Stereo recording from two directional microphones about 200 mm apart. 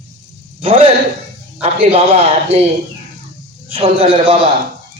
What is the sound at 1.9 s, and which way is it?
Speech, 30° right (ahead or behind).